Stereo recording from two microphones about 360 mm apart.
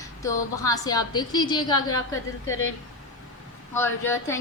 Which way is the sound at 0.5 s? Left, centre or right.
Centre.